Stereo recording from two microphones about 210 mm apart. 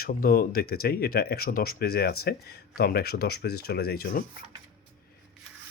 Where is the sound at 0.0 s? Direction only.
45° left (ahead or behind).